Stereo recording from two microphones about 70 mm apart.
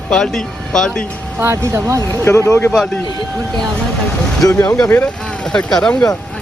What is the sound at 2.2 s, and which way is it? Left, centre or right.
Speech, left.